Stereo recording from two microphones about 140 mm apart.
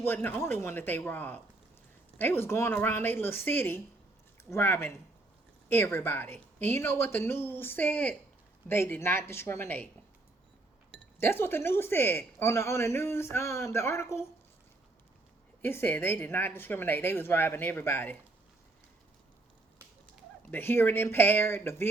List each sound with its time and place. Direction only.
0.0 s speech: 15° left (ahead or behind)
11.2 s speech: 15° left (ahead or behind)
15.6 s speech: 15° left (ahead or behind)
20.5 s speech: 15° left (ahead or behind)